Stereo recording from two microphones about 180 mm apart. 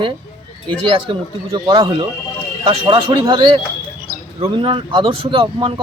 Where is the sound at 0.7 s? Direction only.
30° right (ahead or behind).